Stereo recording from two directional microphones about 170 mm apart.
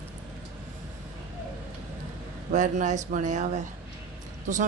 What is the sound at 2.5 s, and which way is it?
Speech, 45° right (ahead or behind).